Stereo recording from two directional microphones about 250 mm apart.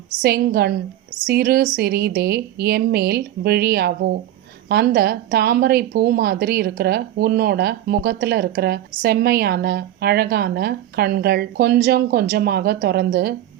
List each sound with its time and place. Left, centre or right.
0.2 s speech: right